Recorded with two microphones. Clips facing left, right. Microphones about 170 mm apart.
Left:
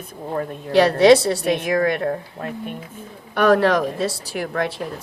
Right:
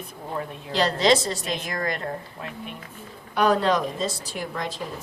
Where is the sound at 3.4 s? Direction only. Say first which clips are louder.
Left 5 dB; 60° left (ahead or behind).